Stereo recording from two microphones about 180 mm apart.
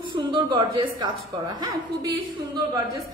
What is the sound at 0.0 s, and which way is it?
A woman's voice, 25° right (ahead or behind).